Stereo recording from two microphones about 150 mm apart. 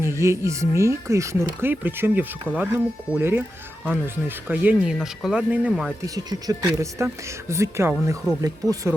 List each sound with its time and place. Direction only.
0.0 s speech: 20° right (ahead or behind)
6.1 s speech: 25° right (ahead or behind)